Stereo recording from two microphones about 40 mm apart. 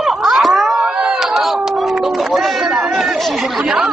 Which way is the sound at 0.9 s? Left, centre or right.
Centre.